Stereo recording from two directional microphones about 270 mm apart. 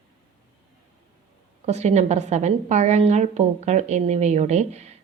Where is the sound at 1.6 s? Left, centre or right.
Right.